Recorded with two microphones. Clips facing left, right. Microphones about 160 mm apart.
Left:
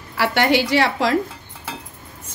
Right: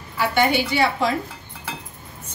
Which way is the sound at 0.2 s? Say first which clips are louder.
Left 2 dB; 85° left.